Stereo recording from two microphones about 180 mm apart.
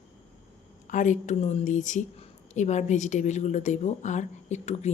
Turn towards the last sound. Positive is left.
turn(degrees=40)  # may be behind; listen again after turning